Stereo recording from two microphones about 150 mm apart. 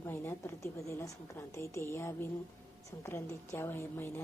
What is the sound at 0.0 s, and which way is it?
A woman's voice, 15° left (ahead or behind).